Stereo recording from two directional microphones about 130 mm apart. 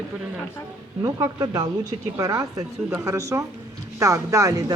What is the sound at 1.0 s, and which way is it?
Speech, 25° right (ahead or behind).